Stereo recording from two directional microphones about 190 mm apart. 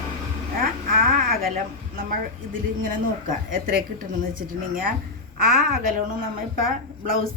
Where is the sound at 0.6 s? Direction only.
50° right (ahead or behind).